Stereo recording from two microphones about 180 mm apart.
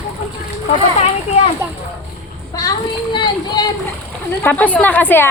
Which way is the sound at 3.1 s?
25° left (ahead or behind).